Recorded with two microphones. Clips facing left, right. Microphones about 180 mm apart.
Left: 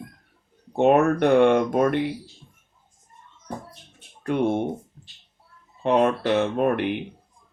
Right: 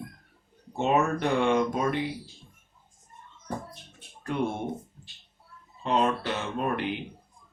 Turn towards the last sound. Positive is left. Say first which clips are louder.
# left 7 dB
turn(degrees=60)  # may be behind; listen again after turning